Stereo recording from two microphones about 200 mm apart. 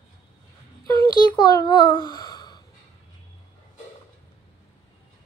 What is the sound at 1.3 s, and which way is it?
A child's voice, 20° left (ahead or behind).